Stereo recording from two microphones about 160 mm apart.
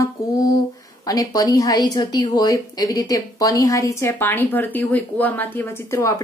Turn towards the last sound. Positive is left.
turn(degrees=20)  # may be behind; listen again after turning